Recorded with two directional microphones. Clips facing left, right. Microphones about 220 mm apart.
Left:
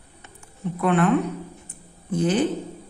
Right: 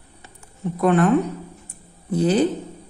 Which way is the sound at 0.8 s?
40° right (ahead or behind).